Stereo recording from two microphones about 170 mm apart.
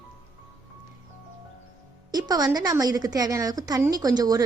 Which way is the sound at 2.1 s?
25° right (ahead or behind).